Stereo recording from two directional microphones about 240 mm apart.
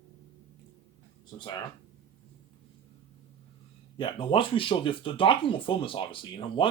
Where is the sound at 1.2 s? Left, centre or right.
Centre.